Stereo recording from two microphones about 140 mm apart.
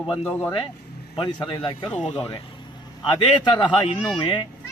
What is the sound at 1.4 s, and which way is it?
Speech, 35° left (ahead or behind).